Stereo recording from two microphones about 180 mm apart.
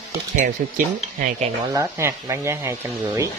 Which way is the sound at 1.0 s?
40° right (ahead or behind).